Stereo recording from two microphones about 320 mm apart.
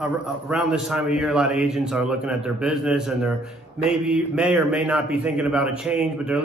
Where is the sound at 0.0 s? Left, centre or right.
Centre.